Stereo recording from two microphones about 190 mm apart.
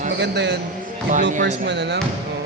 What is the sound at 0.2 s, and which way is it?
Speech, 65° right (ahead or behind).